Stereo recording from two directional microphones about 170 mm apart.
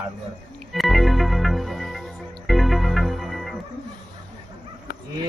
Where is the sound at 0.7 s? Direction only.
Centre (ahead or behind).